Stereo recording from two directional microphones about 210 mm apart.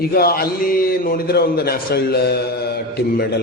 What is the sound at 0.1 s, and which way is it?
A man's voice, 45° left (ahead or behind).